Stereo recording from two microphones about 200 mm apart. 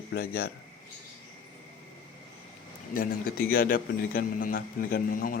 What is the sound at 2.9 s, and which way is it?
A man's voice, 45° left (ahead or behind).